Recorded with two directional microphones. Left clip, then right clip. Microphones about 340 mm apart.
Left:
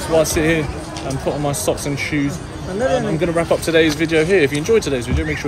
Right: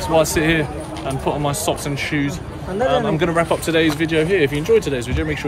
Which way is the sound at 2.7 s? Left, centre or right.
Right.